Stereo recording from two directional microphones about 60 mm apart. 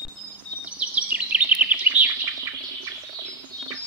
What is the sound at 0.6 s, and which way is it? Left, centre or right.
Bird vocalization, right.